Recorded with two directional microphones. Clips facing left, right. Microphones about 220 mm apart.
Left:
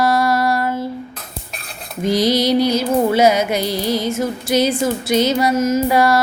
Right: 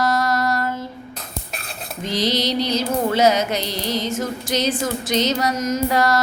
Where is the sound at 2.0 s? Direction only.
10° left (ahead or behind).